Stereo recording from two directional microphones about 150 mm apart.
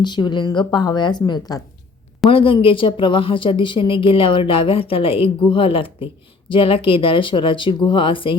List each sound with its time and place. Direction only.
0.0 s a woman's voice: 30° left (ahead or behind)
2.3 s a woman's voice: 35° left (ahead or behind)